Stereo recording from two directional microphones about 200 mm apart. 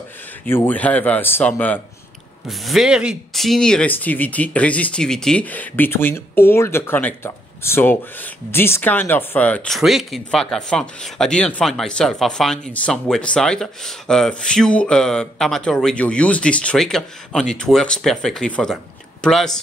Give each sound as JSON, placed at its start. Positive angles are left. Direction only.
{"t": 0.5, "sound": "speech", "side_deg": 10}